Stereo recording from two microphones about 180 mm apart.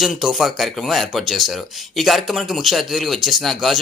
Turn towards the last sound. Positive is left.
turn(degrees=0)  # may be behind; listen again after turning